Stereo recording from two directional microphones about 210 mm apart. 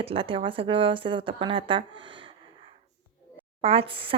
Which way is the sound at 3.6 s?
25° right (ahead or behind).